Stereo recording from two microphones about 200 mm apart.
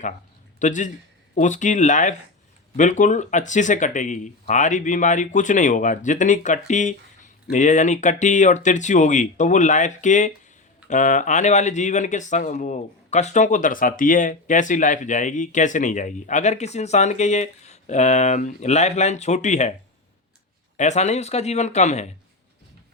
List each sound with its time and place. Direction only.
0.6 s speech: 40° left (ahead or behind)
20.7 s speech: 35° left (ahead or behind)